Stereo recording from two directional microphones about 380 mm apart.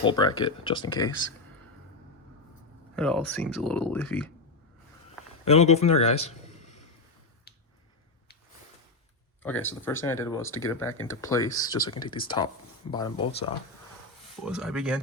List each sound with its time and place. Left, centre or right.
0.0 s speech: centre
2.9 s speech: centre
5.5 s a man's voice: centre
9.4 s speech: centre
14.4 s speech: centre